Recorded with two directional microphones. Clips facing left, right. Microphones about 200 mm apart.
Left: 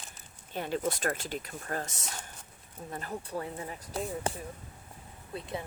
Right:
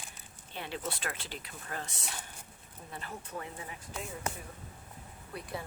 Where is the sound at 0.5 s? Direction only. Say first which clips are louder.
Left 7 dB; 45° left (ahead or behind).